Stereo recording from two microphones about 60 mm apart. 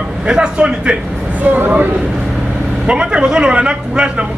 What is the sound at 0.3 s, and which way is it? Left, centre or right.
Speech, centre.